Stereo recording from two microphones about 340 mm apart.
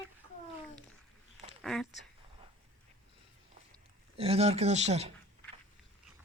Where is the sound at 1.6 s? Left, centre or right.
Centre.